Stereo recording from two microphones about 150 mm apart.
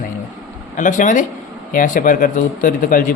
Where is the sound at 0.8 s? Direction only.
60° left (ahead or behind).